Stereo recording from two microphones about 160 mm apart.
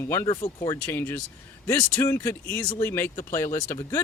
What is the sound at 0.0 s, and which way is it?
Speech, 15° left (ahead or behind).